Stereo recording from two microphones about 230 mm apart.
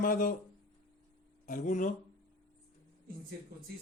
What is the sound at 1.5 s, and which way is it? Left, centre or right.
Speech, left.